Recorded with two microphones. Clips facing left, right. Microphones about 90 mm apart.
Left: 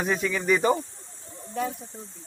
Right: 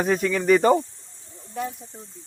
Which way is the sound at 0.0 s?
50° right (ahead or behind).